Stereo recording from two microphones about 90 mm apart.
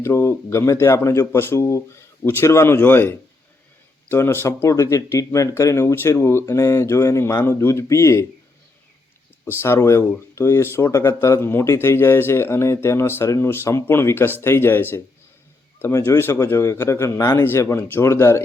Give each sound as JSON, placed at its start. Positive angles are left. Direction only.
{"t": 0.0, "sound": "speech", "side_deg": 25}
{"t": 9.4, "sound": "speech", "side_deg": 25}